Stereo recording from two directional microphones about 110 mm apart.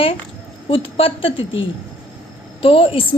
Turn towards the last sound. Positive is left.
turn(degrees=55)  # may be behind; listen again after turning